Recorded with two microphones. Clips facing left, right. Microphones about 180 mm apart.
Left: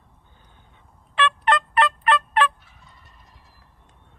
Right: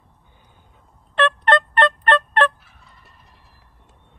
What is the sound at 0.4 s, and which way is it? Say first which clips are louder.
Fowl: right 1 dB; 5° right (ahead or behind).